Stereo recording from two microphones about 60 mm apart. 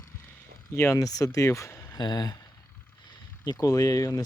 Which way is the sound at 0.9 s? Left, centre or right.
Left.